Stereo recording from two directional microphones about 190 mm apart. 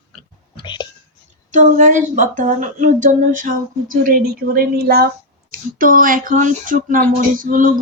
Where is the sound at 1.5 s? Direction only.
40° right (ahead or behind).